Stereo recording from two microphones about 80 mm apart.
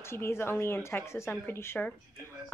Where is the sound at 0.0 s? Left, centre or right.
Left.